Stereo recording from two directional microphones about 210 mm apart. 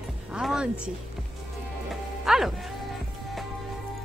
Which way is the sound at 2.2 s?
Centre (ahead or behind).